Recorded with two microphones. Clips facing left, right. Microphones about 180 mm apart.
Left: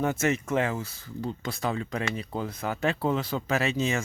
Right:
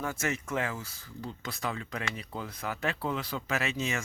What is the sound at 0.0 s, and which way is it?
Speech, 25° left (ahead or behind).